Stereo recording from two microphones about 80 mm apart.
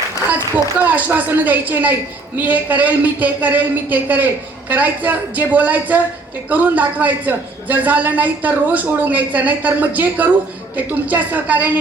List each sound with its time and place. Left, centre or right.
0.8 s a man's voice: right